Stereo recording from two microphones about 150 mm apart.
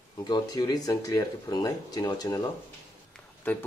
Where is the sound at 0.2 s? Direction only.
25° left (ahead or behind).